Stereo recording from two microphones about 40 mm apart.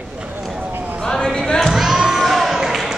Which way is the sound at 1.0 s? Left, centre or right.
Centre.